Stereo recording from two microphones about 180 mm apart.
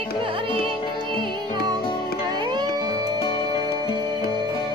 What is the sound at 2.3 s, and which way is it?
Music, 25° right (ahead or behind).